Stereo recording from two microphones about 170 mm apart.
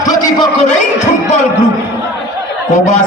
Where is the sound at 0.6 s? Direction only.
45° left (ahead or behind).